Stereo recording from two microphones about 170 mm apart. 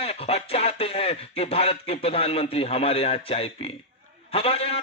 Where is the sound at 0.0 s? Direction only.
35° left (ahead or behind).